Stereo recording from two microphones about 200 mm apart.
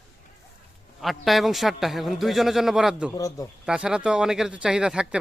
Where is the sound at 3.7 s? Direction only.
5° right (ahead or behind).